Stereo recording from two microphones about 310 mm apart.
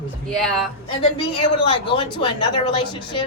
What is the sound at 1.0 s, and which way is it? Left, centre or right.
Speech, centre.